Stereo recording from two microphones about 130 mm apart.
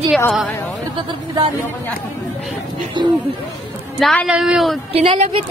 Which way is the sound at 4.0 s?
5° left (ahead or behind).